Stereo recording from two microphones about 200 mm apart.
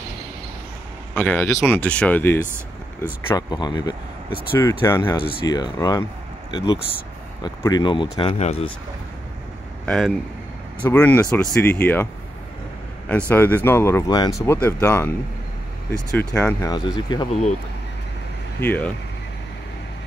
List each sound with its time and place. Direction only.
1.1 s speech: 10° left (ahead or behind); by 8.7 s 30° left (ahead or behind)
9.8 s speech: centre (ahead or behind)
13.3 s speech: 10° left (ahead or behind)
16.2 s speech: 10° left (ahead or behind)
16.7 s speech: 20° left (ahead or behind)
18.6 s speech: 10° left (ahead or behind)